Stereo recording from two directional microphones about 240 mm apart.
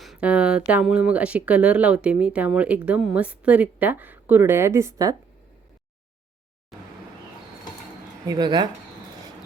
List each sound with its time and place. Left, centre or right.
0.0 s speech: centre
8.3 s speech: centre